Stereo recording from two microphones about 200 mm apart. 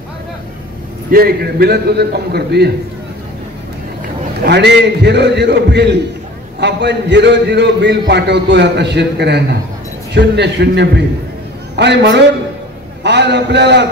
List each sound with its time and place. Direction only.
1.1 s a man's voice: 50° right (ahead or behind)
4.5 s a man's voice: 60° right (ahead or behind)